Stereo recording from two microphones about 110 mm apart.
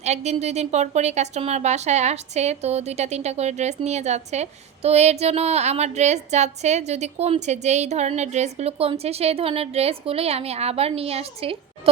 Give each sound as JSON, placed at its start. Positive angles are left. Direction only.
{"t": 0.0, "sound": "a woman's voice", "side_deg": -90}